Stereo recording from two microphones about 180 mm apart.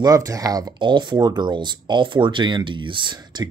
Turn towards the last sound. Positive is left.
turn(degrees=-25)  # may be behind; listen again after turning